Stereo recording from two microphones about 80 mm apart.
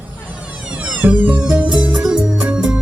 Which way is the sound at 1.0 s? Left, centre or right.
Centre.